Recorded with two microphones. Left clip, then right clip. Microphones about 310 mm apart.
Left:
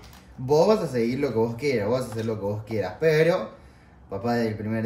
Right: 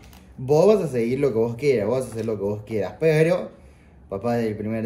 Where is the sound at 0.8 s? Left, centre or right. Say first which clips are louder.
Right 3 dB; centre.